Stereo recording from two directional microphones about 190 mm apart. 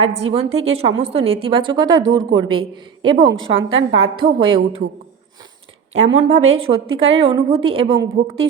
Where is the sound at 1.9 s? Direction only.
90° right.